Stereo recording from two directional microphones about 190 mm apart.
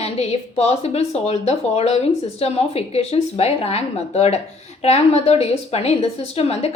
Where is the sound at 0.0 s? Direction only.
30° left (ahead or behind).